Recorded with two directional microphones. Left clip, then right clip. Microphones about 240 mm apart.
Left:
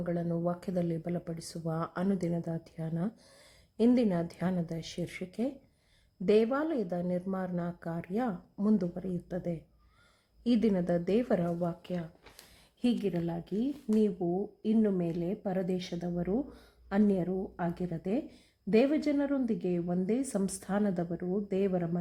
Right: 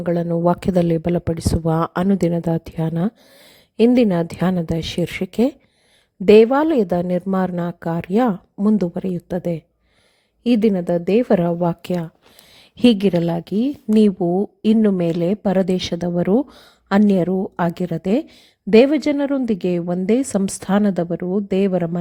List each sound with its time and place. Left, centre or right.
0.0 s a woman's voice: right